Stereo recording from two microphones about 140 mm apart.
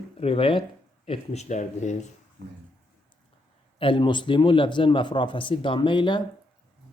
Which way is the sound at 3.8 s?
35° left (ahead or behind).